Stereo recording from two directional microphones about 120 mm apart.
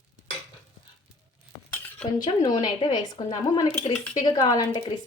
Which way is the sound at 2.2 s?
35° left (ahead or behind).